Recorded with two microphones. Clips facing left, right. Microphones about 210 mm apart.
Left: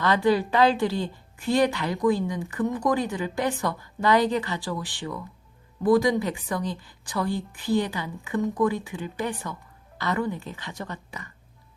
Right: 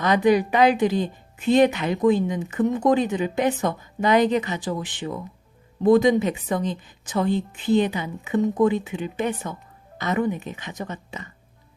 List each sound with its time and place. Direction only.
0.0 s a woman's voice: 20° right (ahead or behind)